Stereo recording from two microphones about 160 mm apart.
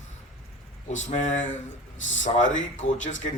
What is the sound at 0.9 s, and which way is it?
Speech, 50° left (ahead or behind).